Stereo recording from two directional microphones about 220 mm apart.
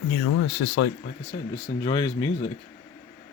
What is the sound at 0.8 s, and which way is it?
Speech, 65° left (ahead or behind).